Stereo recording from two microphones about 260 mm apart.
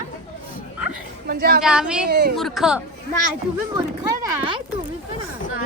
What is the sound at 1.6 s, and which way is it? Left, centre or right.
A woman's voice, centre.